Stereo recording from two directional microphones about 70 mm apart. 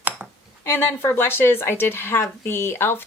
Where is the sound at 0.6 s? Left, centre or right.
Left.